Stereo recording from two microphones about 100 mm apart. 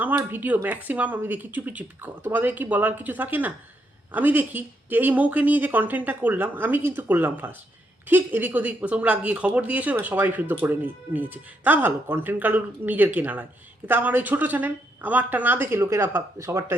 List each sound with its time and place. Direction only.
0.3 s speech: 15° right (ahead or behind)